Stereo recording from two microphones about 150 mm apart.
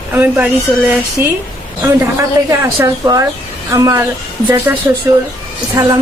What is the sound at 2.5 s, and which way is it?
A woman's voice, 20° right (ahead or behind).